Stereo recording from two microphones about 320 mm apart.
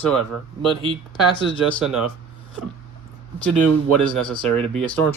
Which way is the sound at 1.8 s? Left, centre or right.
Centre.